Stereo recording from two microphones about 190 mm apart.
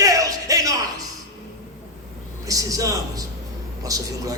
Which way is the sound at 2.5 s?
20° right (ahead or behind).